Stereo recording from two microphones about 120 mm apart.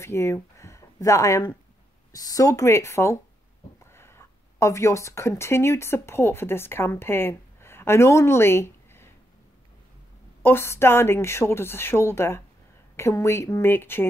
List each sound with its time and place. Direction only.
0.0 s a woman's voice: 25° left (ahead or behind)
10.4 s a woman's voice: 20° left (ahead or behind)